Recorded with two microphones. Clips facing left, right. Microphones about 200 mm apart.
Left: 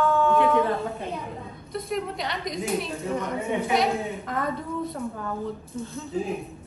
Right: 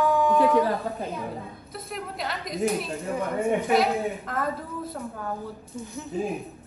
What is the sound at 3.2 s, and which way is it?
Speech, 55° right (ahead or behind).